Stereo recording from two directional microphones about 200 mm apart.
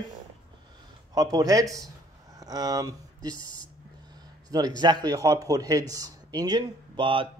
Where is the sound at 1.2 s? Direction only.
20° right (ahead or behind).